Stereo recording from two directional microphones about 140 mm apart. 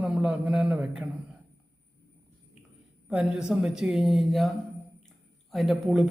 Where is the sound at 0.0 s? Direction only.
10° right (ahead or behind).